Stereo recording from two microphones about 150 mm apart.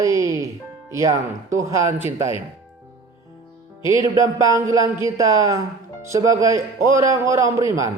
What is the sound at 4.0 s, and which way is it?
A man's voice, 20° right (ahead or behind).